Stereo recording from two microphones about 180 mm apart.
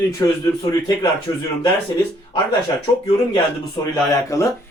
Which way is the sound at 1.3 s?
15° left (ahead or behind).